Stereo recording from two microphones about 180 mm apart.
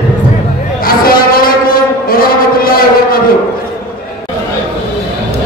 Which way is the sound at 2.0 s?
55° left (ahead or behind).